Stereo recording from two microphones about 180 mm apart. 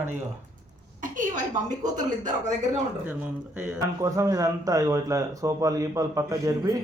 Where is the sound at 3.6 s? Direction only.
15° right (ahead or behind).